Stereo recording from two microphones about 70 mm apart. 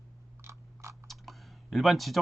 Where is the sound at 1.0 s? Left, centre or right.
Centre.